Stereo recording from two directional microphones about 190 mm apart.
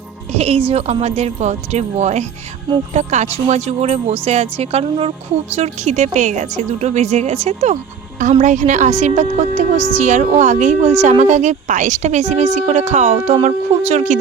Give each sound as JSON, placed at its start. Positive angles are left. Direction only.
{"t": 0.3, "sound": "a woman's voice", "side_deg": -35}